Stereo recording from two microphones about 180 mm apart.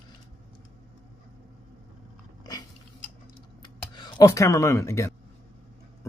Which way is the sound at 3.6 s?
25° left (ahead or behind).